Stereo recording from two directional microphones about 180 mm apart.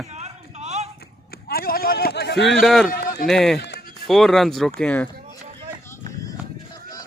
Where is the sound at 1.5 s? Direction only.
55° left (ahead or behind).